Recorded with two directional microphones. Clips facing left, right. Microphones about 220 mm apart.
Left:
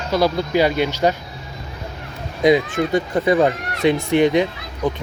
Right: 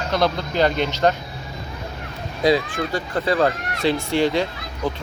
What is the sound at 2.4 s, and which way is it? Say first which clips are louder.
A man's voice: left 4 dB; 20° left (ahead or behind).